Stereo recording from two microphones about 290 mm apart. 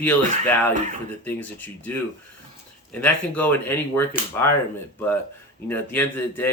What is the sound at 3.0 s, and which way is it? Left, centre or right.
Speech, centre.